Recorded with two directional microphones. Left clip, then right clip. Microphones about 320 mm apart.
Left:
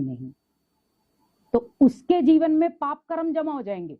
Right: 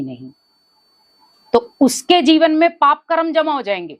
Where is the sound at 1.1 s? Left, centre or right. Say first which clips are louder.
Right 9 dB; centre.